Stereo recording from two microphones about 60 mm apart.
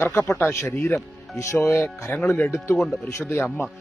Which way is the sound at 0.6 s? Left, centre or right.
Left.